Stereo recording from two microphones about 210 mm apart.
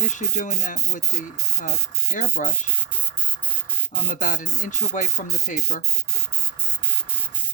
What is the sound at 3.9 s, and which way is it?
Speech, 35° left (ahead or behind).